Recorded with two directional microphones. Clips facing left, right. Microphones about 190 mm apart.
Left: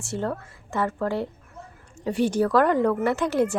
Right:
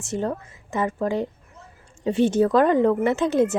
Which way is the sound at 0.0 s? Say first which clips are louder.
Right 2 dB; 20° right (ahead or behind).